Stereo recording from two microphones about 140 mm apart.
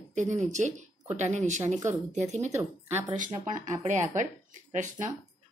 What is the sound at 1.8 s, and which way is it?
Speech, 25° right (ahead or behind).